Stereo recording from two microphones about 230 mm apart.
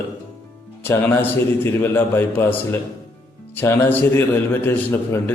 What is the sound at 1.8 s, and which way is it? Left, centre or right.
A man's voice, centre.